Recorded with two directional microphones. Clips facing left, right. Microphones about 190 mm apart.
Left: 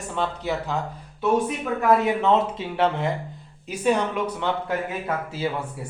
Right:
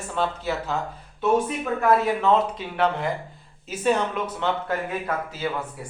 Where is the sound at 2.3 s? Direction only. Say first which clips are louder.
Even; 25° left (ahead or behind).